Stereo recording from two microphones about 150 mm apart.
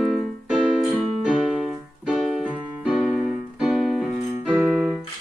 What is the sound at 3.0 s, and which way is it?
Keyboard, centre (ahead or behind).